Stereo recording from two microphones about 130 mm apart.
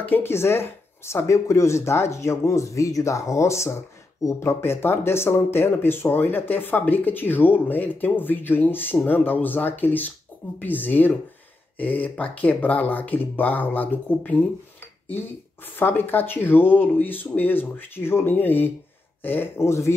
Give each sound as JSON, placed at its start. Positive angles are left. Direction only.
{"t": 0.0, "sound": "speech", "side_deg": 15}
{"t": 15.7, "sound": "speech", "side_deg": 15}